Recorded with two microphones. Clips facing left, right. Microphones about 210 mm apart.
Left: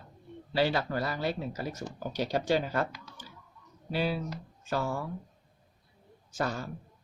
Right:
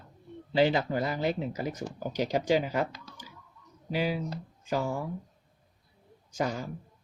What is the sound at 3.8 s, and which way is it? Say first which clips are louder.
Speech: right 1 dB; 15° right (ahead or behind).